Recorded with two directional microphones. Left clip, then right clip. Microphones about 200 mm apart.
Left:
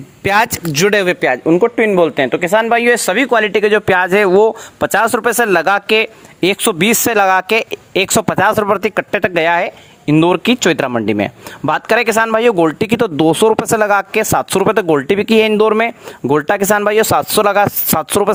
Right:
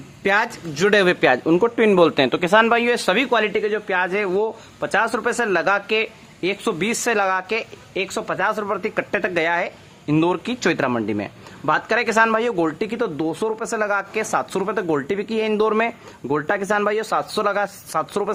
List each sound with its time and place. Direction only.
0.2 s speech: 50° left (ahead or behind)
3.6 s speech: 55° left (ahead or behind)